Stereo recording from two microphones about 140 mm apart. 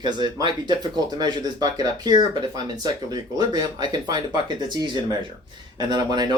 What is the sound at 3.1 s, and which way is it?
Speech, 30° right (ahead or behind).